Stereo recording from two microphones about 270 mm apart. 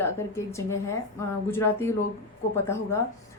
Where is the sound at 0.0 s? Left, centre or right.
Centre.